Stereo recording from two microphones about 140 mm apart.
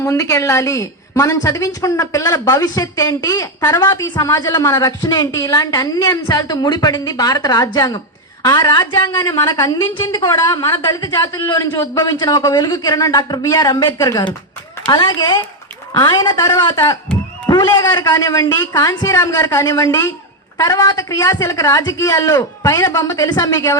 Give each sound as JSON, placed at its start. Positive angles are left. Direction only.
{"t": 0.0, "sound": "a woman's voice", "side_deg": 25}